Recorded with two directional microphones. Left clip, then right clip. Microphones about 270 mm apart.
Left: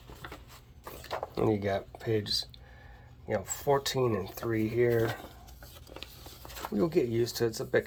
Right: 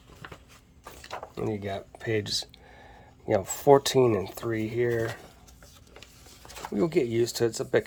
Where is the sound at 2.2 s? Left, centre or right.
Centre.